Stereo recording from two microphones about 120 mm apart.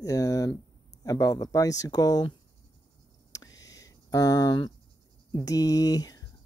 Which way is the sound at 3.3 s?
30° left (ahead or behind).